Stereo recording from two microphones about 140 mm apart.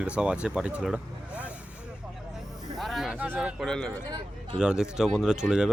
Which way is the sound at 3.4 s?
Centre (ahead or behind).